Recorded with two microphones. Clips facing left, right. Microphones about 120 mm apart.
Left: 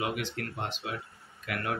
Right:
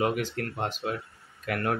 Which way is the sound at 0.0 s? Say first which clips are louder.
Right 5 dB; 40° right (ahead or behind).